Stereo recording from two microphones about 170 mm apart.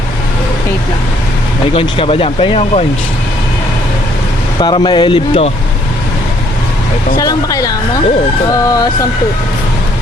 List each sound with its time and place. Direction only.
1.7 s speech: 30° left (ahead or behind)
4.6 s speech: 25° left (ahead or behind)
7.2 s speech: 20° left (ahead or behind)